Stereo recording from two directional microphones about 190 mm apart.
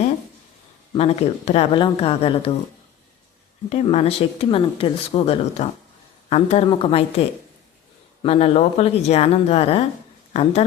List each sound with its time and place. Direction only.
0.9 s speech: 35° left (ahead or behind)
3.7 s speech: 35° left (ahead or behind)